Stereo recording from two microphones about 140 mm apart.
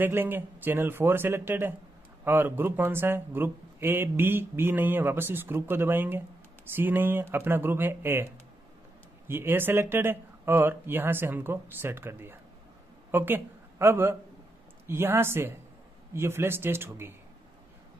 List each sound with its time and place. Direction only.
0.0 s speech: 15° right (ahead or behind)
9.3 s speech: 15° right (ahead or behind)